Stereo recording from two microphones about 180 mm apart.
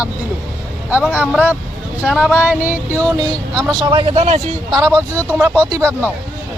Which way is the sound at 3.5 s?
25° right (ahead or behind).